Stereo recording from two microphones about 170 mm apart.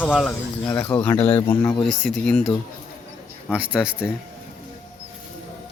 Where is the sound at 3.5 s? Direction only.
5° right (ahead or behind).